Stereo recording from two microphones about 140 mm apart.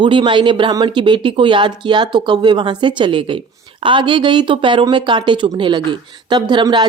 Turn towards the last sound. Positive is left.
turn(degrees=-35)  # may be behind; listen again after turning